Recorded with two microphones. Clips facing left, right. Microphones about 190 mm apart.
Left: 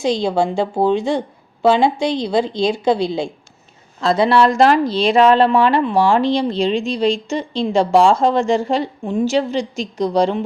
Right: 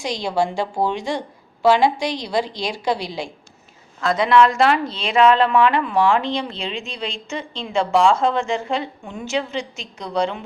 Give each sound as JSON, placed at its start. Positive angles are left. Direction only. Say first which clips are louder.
{"t": 0.0, "sound": "a woman's voice", "louder": "left 5 dB", "side_deg": 25}